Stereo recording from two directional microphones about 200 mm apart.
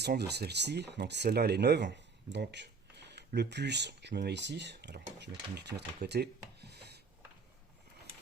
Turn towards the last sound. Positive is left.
turn(degrees=-55)  # may be behind; listen again after turning